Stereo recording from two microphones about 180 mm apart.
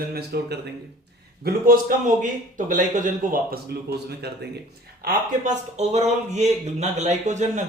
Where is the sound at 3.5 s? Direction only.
65° right (ahead or behind).